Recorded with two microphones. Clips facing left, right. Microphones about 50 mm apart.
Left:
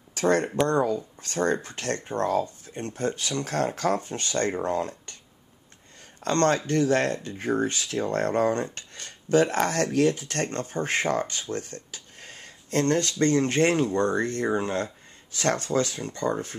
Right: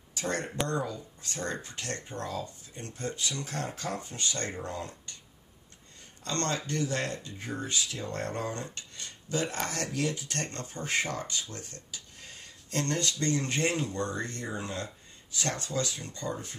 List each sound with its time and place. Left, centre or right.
0.1 s speech: left
6.2 s speech: left